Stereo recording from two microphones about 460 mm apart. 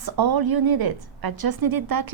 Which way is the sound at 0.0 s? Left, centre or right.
Right.